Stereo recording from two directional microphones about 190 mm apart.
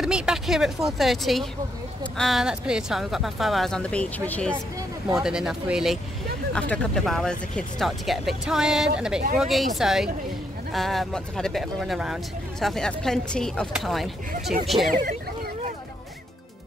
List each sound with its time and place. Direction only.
0.0 s speech: 5° right (ahead or behind)
14.9 s speech: 45° right (ahead or behind)